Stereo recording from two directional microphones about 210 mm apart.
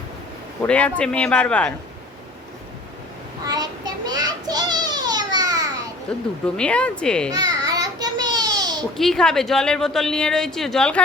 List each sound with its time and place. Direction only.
0.6 s a woman's voice: 5° left (ahead or behind)
3.4 s child singing: 20° right (ahead or behind)
6.6 s a woman's voice: 5° left (ahead or behind)
7.3 s a sound: 15° right (ahead or behind)
9.0 s a woman's voice: centre (ahead or behind)